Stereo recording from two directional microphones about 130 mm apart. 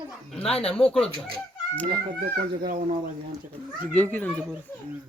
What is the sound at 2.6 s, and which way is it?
Speech, 90° right.